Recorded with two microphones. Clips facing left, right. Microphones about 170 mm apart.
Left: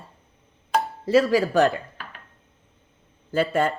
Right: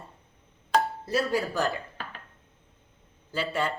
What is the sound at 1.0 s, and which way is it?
Speech, 90° left.